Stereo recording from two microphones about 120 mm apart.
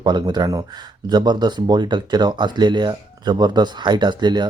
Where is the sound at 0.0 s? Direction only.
35° right (ahead or behind).